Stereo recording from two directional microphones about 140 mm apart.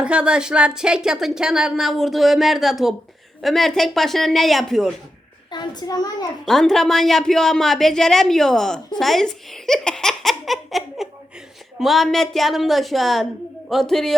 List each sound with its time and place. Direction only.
0.0 s speech: 10° right (ahead or behind)
5.5 s a child's voice: 30° left (ahead or behind)
6.4 s speech: 5° left (ahead or behind)
9.0 s giggle: centre (ahead or behind)
11.8 s speech: centre (ahead or behind)